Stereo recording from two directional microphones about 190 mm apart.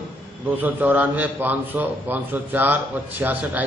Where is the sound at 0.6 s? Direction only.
10° right (ahead or behind).